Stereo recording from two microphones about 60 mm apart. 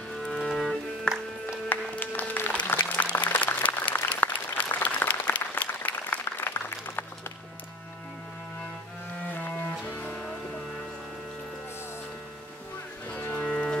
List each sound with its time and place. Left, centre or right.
0.4 s music: centre
1.7 s music: left
4.7 s applause: left
9.9 s music: left
13.4 s music: centre